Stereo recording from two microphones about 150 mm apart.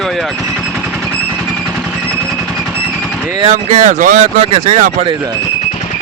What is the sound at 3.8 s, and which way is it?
Speech, 60° right (ahead or behind).